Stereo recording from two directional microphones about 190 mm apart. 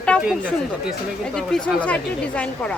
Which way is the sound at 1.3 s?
5° left (ahead or behind).